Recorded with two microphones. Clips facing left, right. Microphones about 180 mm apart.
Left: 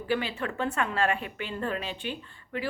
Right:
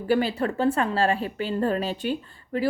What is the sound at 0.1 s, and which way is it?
A woman's voice, 40° right (ahead or behind).